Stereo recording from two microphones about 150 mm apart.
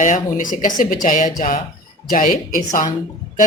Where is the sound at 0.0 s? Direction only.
60° left (ahead or behind).